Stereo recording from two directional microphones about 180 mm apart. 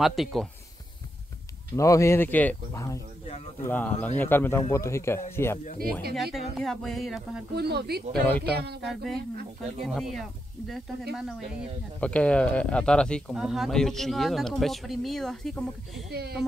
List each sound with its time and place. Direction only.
0.0 s speech: centre (ahead or behind)
1.8 s speech: 15° left (ahead or behind)
6.1 s speech: centre (ahead or behind)
7.5 s speech: 65° right (ahead or behind)
8.8 s speech: centre (ahead or behind)
16.1 s speech: 60° right (ahead or behind)